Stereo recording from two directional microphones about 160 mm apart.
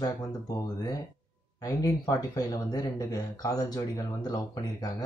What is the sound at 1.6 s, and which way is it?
Speech, 20° left (ahead or behind).